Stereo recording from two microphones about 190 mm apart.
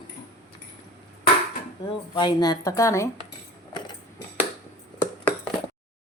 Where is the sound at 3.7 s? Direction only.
25° left (ahead or behind).